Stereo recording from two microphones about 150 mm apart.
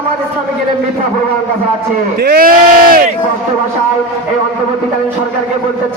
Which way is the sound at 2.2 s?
85° right.